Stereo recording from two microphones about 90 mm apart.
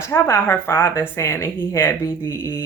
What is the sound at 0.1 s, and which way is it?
A woman's voice, 25° left (ahead or behind).